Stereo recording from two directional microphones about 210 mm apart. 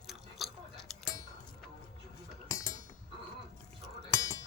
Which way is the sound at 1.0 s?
15° left (ahead or behind).